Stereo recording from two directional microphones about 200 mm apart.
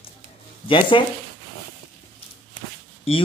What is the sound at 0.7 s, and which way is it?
Speech, 25° left (ahead or behind).